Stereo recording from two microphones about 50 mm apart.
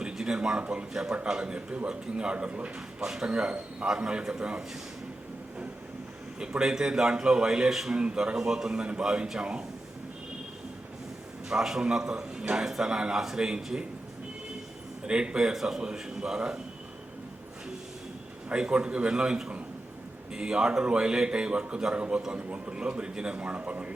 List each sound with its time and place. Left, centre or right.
0.0 s a sound: centre
0.3 s a man's voice: centre
3.0 s a man's voice: centre
6.4 s a man's voice: centre
11.4 s a man's voice: centre
15.0 s a man's voice: centre
18.4 s a man's voice: right